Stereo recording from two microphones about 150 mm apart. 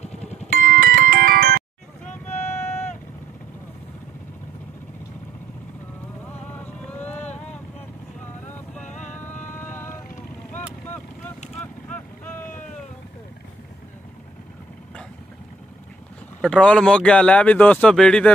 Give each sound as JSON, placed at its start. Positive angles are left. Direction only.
{"t": 0.0, "sound": "music", "side_deg": 45}
{"t": 0.5, "sound": "music", "side_deg": -75}
{"t": 6.2, "sound": "vehicle", "side_deg": 10}
{"t": 9.0, "sound": "music", "side_deg": 10}
{"t": 11.6, "sound": "boat", "side_deg": 10}
{"t": 16.3, "sound": "speech", "side_deg": 5}